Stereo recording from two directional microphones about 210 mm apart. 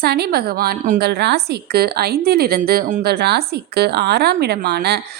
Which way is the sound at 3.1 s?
50° right (ahead or behind).